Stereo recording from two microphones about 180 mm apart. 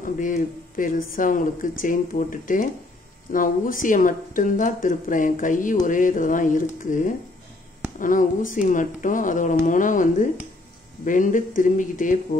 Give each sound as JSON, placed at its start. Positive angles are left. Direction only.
{"t": 0.0, "sound": "a woman's voice", "side_deg": 50}